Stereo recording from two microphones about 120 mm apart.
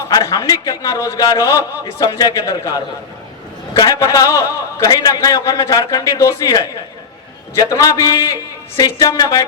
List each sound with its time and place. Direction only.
0.0 s a man's voice: 30° left (ahead or behind)
3.8 s a man's voice: 30° left (ahead or behind)